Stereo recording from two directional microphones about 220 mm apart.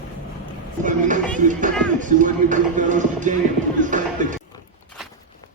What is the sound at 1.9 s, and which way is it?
Music, 35° right (ahead or behind).